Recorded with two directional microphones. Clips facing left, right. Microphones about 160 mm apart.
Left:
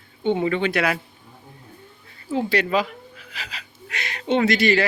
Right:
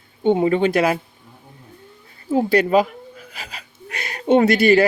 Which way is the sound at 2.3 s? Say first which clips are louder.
Right 6 dB; 45° right (ahead or behind).